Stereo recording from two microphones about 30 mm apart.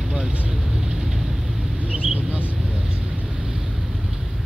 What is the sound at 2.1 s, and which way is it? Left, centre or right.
Vehicle, right.